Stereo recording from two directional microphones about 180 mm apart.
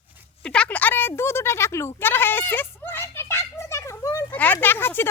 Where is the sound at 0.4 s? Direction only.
5° left (ahead or behind).